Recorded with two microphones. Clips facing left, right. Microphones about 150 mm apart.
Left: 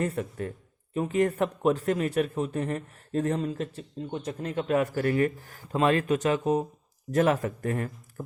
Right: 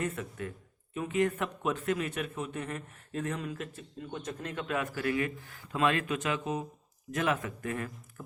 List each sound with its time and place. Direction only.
0.0 s a man's voice: 35° left (ahead or behind)